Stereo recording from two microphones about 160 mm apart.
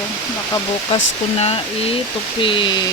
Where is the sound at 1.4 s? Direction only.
40° left (ahead or behind).